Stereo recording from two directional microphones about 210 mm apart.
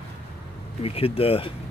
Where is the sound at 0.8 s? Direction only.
25° left (ahead or behind).